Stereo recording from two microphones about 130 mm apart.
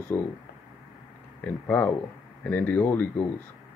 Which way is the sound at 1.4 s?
10° left (ahead or behind).